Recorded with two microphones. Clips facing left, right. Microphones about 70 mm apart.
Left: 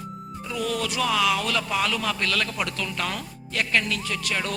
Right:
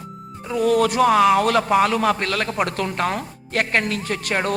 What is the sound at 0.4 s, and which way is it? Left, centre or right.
Speech, right.